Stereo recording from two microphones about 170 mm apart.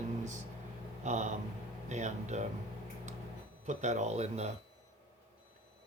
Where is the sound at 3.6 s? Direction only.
45° right (ahead or behind).